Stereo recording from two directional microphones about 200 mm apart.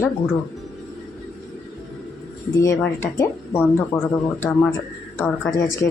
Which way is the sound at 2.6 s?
15° left (ahead or behind).